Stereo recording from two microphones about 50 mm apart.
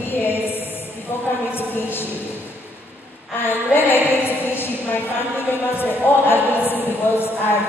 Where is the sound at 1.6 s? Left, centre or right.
Left.